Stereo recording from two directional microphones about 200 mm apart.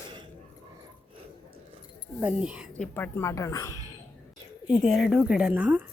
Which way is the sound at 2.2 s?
5° right (ahead or behind).